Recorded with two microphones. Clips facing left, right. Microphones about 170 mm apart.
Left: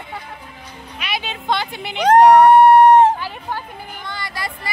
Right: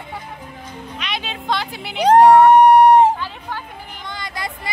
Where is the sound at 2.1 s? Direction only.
10° right (ahead or behind).